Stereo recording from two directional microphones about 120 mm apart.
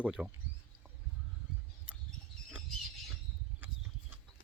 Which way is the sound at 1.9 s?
10° right (ahead or behind).